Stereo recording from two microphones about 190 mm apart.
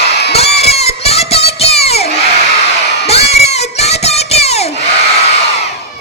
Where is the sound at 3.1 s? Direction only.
35° left (ahead or behind).